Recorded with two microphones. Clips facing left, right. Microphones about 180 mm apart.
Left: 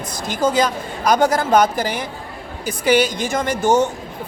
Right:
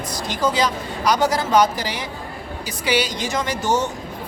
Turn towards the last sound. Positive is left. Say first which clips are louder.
# left 5 dB
turn(degrees=50)  # may be behind; listen again after turning